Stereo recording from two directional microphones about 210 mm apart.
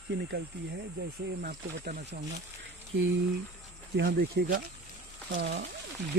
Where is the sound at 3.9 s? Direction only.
45° right (ahead or behind).